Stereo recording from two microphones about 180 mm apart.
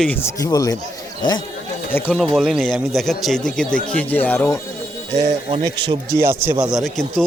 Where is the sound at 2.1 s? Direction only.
Centre (ahead or behind).